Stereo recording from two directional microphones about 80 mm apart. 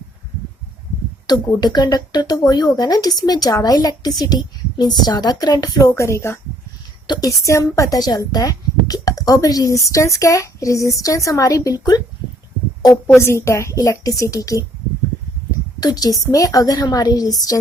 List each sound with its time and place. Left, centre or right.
1.3 s speech: left
5.9 s speech: left
7.1 s speech: left
13.1 s speech: left
15.8 s speech: left